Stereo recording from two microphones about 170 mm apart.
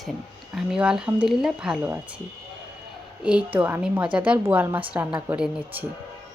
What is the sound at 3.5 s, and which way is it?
A woman's voice, 10° right (ahead or behind).